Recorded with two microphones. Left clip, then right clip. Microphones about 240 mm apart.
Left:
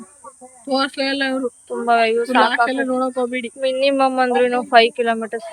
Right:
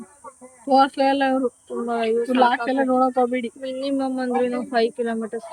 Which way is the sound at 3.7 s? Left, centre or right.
Centre.